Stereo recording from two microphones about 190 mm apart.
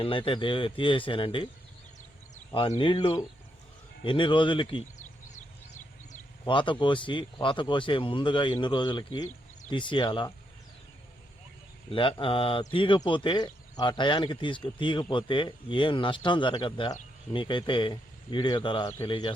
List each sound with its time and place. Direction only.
0.0 s speech: 25° left (ahead or behind)
2.5 s speech: 25° left (ahead or behind)
4.9 s a sound: 40° left (ahead or behind)
6.4 s speech: 25° left (ahead or behind)
11.9 s speech: 25° left (ahead or behind)